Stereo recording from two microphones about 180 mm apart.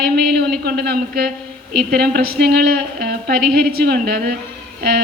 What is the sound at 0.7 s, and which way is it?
A woman's voice, 60° right (ahead or behind).